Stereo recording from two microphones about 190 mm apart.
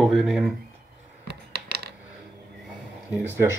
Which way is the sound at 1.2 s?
60° right (ahead or behind).